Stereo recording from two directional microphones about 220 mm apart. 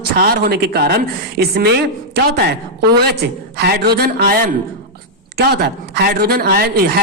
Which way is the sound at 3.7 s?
45° right (ahead or behind).